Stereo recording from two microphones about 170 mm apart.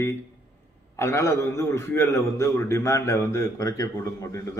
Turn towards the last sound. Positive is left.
turn(degrees=15)  # may be behind; listen again after turning